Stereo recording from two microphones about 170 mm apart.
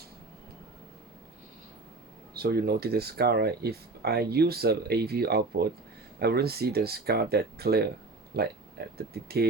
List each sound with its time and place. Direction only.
2.3 s speech: 70° right (ahead or behind)